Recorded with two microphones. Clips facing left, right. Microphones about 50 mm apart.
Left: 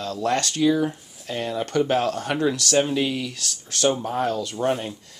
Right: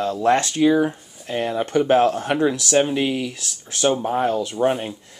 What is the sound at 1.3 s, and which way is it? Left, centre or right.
Speech, right.